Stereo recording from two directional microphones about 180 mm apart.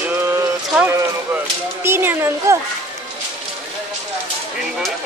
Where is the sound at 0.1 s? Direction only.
10° right (ahead or behind).